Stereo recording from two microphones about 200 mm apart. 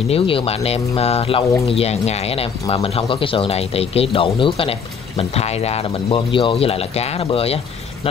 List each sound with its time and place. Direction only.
0.1 s speech: 30° left (ahead or behind)